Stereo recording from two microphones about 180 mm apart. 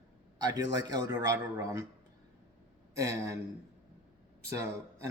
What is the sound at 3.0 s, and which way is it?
Speech, 15° right (ahead or behind).